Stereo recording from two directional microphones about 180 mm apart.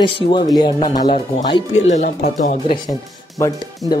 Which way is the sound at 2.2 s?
45° left (ahead or behind).